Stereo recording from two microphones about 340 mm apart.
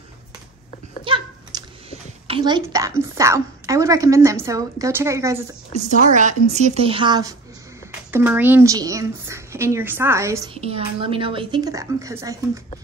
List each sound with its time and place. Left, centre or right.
1.0 s a child's voice: centre
5.7 s a woman's voice: right